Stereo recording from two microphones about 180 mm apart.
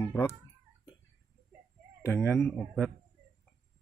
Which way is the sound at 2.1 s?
10° left (ahead or behind).